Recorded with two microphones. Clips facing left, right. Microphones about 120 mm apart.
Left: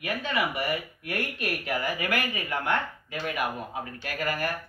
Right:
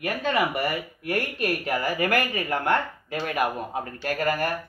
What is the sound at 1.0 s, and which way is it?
Speech, 35° right (ahead or behind).